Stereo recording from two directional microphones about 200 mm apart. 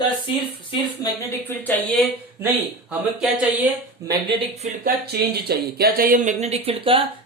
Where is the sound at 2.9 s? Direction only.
5° right (ahead or behind).